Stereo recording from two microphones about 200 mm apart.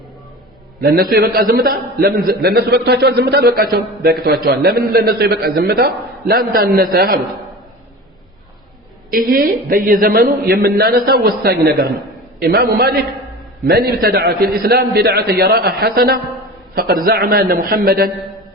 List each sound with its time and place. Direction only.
0.8 s a man's voice: 50° right (ahead or behind)
9.1 s a man's voice: 45° right (ahead or behind)